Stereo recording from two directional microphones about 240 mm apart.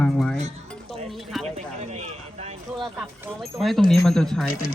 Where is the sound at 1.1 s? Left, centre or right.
Centre.